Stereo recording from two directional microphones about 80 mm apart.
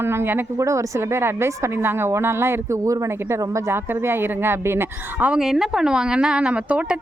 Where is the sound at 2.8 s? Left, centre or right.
Right.